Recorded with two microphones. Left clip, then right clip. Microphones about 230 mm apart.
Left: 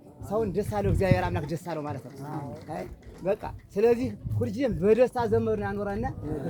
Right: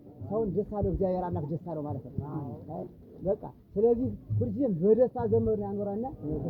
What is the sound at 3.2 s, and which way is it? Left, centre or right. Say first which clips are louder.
Speech: left 2 dB; left.